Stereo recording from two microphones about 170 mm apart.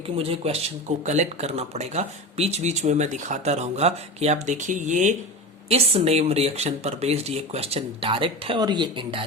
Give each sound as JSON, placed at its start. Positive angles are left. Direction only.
{"t": 0.2, "sound": "speech", "side_deg": -35}